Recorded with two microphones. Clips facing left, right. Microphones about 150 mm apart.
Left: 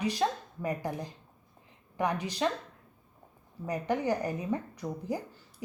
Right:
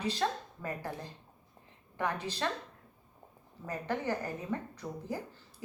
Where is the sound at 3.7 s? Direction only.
15° left (ahead or behind).